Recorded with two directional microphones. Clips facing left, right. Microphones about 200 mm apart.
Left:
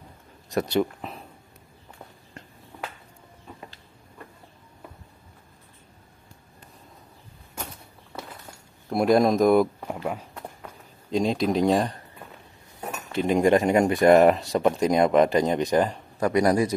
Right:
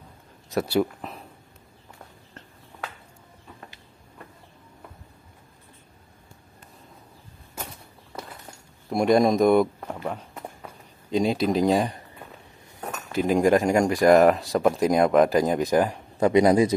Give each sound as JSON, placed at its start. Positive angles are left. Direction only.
{"t": 0.5, "sound": "speech", "side_deg": -5}
{"t": 8.8, "sound": "speech", "side_deg": 0}
{"t": 11.1, "sound": "speech", "side_deg": 0}
{"t": 13.1, "sound": "speech", "side_deg": -5}
{"t": 16.2, "sound": "speech", "side_deg": -20}